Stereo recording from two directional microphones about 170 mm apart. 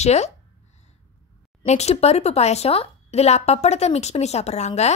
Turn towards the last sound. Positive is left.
turn(degrees=40)  # may be behind; listen again after turning